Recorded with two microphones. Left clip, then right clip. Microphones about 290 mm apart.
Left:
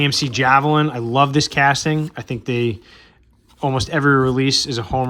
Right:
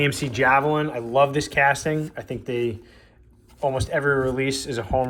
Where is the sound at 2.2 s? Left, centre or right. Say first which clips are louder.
Left 5 dB; left.